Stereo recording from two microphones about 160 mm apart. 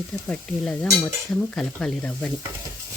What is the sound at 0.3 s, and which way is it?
Speech, 5° left (ahead or behind).